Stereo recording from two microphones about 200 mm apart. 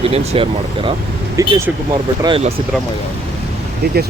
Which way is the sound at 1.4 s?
15° right (ahead or behind).